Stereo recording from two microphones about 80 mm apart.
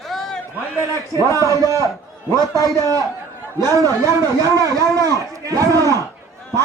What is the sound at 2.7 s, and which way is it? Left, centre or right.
Speech, right.